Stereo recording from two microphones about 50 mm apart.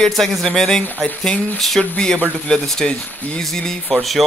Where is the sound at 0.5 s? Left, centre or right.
Centre.